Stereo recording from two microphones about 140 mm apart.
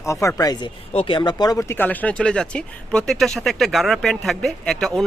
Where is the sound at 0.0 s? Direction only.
20° left (ahead or behind).